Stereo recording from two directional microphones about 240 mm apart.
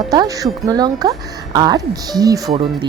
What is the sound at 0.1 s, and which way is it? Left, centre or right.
A woman's voice, centre.